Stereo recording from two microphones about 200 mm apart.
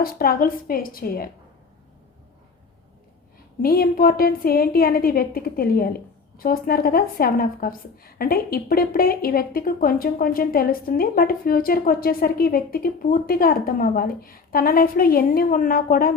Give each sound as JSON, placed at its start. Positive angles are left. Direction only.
{"t": 0.0, "sound": "a woman's voice", "side_deg": 50}
{"t": 3.6, "sound": "a woman's voice", "side_deg": 50}